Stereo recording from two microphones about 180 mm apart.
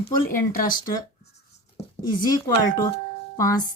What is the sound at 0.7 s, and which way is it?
Speech, 20° left (ahead or behind).